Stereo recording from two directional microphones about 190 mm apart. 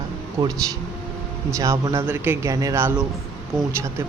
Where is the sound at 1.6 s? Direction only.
15° right (ahead or behind).